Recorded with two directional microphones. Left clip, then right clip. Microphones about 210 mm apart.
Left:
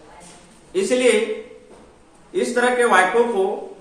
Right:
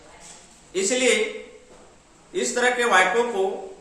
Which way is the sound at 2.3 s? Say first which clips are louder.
Left 3 dB; 15° right (ahead or behind).